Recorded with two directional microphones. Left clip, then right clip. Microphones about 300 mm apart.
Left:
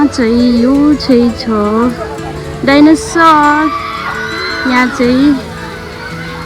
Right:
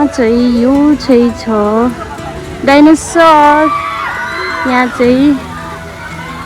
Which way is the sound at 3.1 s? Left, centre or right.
Right.